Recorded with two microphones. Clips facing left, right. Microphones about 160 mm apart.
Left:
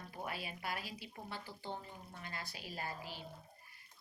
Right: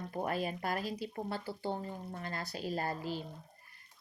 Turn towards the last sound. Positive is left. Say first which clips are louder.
# right 9 dB
turn(degrees=-45)  # may be behind; listen again after turning